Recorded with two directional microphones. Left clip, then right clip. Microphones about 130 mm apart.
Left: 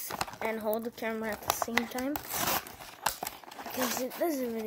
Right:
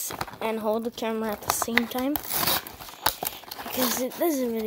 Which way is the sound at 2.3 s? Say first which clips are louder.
Right 5 dB; 20° right (ahead or behind).